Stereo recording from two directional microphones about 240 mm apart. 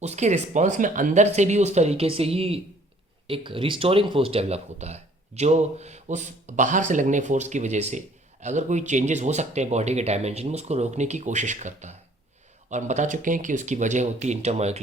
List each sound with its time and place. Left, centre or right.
0.0 s speech: right